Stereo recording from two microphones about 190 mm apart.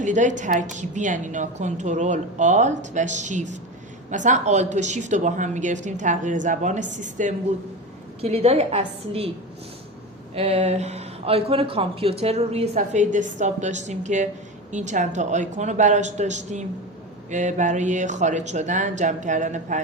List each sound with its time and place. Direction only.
0.0 s speech: 40° right (ahead or behind)
10.3 s speech: 35° right (ahead or behind)